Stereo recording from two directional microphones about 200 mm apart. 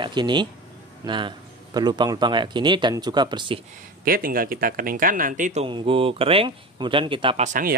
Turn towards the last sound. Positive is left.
turn(degrees=-25)  # may be behind; listen again after turning